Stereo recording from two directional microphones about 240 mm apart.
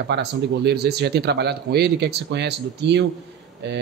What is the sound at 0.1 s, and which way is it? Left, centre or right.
Speech, right.